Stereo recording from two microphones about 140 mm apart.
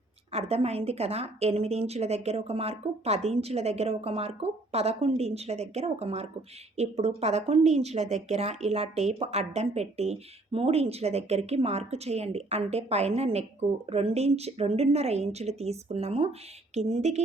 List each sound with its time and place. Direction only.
0.3 s speech: 50° right (ahead or behind)